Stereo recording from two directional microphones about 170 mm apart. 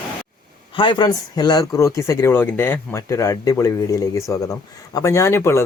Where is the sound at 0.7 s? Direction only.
25° left (ahead or behind).